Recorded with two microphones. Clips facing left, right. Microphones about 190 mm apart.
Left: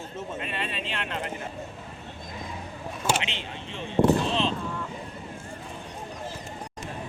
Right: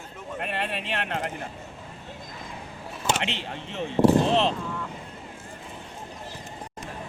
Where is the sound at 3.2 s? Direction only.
65° right (ahead or behind).